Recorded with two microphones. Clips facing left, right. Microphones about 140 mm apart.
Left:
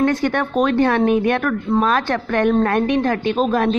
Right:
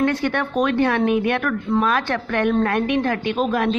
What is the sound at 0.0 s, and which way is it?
Speech, 45° left (ahead or behind).